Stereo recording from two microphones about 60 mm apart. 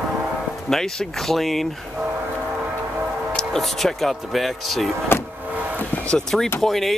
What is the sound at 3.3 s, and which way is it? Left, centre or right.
Speech, centre.